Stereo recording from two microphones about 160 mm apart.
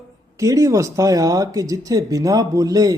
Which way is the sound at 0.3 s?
20° right (ahead or behind).